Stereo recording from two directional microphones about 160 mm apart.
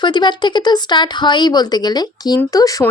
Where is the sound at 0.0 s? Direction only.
30° left (ahead or behind).